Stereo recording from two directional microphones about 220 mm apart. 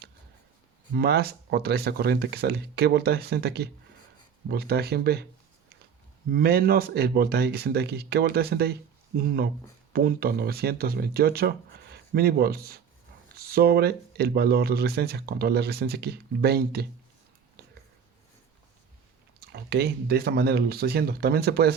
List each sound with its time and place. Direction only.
0.9 s speech: 45° right (ahead or behind)
6.3 s speech: 45° right (ahead or behind)
19.4 s speech: 50° right (ahead or behind)